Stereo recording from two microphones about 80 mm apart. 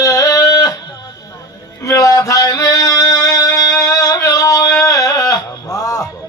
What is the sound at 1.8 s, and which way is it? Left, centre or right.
Music, left.